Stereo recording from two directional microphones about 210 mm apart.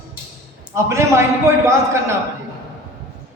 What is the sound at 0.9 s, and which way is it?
Speech, 15° right (ahead or behind).